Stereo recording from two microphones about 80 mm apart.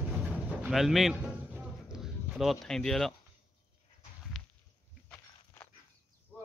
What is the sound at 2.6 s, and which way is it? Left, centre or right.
Speech, centre.